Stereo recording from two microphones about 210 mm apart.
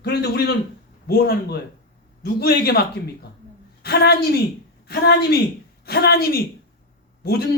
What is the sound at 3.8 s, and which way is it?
A woman's voice, 50° left (ahead or behind).